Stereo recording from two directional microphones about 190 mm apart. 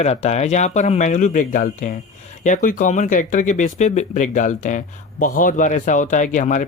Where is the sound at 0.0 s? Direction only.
35° left (ahead or behind).